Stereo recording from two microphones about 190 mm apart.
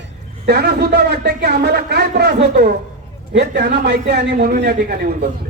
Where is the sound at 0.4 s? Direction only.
55° right (ahead or behind).